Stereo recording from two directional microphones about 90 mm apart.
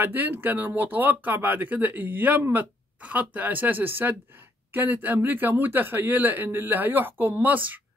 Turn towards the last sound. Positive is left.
turn(degrees=-20)  # may be behind; listen again after turning